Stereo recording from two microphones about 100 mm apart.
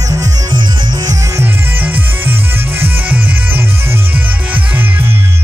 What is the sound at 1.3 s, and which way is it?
Music, 20° right (ahead or behind).